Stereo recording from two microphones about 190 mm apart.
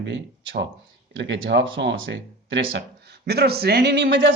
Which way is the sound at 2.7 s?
60° right (ahead or behind).